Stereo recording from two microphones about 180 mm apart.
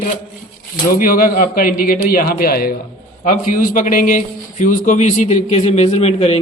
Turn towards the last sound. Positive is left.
turn(degrees=35)  # may be behind; listen again after turning